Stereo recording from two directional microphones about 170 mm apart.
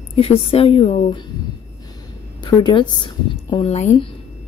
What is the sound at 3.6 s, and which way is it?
Speech, 40° left (ahead or behind).